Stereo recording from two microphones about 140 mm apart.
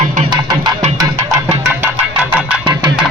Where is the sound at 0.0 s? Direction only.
60° right (ahead or behind).